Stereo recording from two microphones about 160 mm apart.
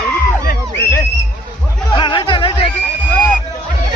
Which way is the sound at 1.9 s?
30° left (ahead or behind).